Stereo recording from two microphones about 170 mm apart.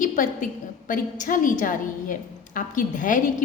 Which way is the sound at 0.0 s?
50° left (ahead or behind).